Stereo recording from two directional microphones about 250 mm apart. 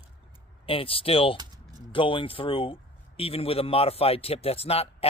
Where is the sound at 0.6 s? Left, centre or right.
Left.